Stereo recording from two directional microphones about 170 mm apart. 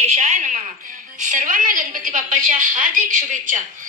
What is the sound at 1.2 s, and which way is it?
A woman's voice, 50° right (ahead or behind).